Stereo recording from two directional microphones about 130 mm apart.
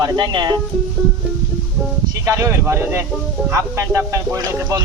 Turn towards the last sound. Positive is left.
turn(degrees=-25)  # may be behind; listen again after turning